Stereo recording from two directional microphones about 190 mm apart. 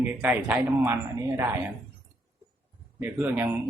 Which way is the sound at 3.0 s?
10° right (ahead or behind).